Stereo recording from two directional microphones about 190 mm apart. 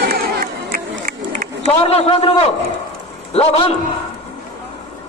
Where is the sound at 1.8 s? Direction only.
30° left (ahead or behind).